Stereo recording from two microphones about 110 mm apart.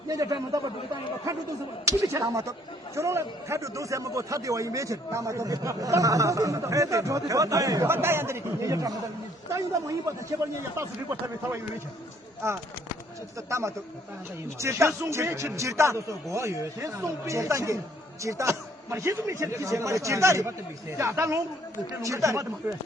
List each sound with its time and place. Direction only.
0.1 s a man's voice: 35° right (ahead or behind)
1.8 s speech: 30° right (ahead or behind)
13.5 s speech: 25° right (ahead or behind)